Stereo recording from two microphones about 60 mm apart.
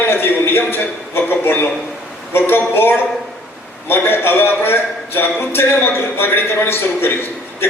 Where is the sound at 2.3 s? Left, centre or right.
Left.